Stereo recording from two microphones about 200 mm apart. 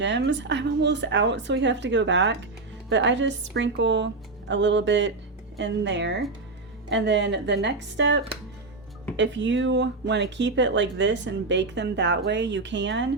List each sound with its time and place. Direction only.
0.0 s speech: 65° right (ahead or behind)